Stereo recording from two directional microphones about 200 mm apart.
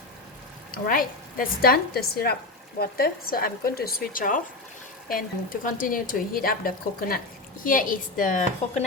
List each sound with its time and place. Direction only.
0.7 s speech: 45° left (ahead or behind)